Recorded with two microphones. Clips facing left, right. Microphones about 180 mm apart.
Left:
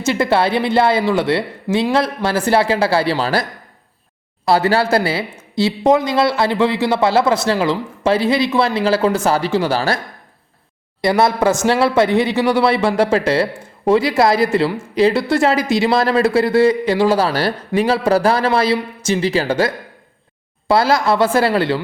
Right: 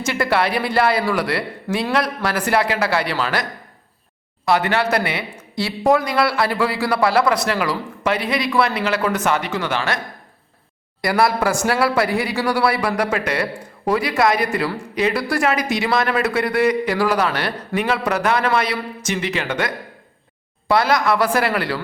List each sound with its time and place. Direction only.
0.0 s speech: 25° left (ahead or behind)
4.4 s speech: 30° left (ahead or behind)
11.0 s a man's voice: 25° left (ahead or behind)